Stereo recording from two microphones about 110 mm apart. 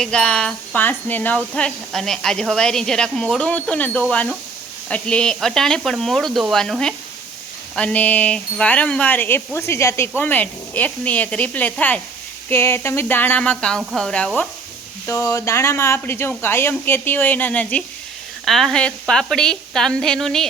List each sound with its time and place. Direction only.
0.0 s a woman's voice: 10° left (ahead or behind)
15.0 s a woman's voice: 25° left (ahead or behind); by 20.5 s 5° left (ahead or behind)